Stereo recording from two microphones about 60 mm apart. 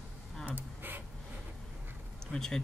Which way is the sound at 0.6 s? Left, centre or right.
Right.